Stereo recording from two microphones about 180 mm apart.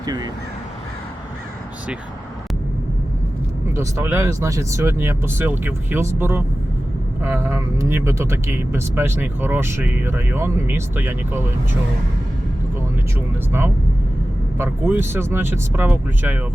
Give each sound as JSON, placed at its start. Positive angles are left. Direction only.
{"t": 0.0, "sound": "speech", "side_deg": -20}
{"t": 3.8, "sound": "speech", "side_deg": -15}
{"t": 14.6, "sound": "speech", "side_deg": -10}